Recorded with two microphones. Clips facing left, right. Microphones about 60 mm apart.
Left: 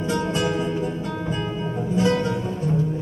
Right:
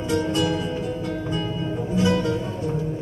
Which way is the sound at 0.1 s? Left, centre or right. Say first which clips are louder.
Right 2 dB; left.